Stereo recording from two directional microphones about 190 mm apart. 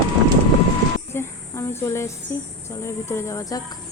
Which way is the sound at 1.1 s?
10° left (ahead or behind).